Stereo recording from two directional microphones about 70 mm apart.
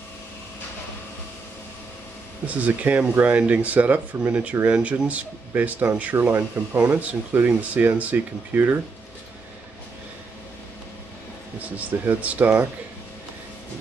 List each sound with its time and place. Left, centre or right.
2.4 s speech: right
11.7 s speech: right